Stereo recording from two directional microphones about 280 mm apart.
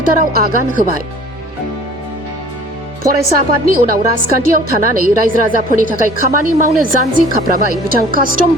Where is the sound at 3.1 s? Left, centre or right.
Right.